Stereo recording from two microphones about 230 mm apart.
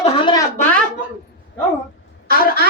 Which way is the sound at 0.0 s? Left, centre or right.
Left.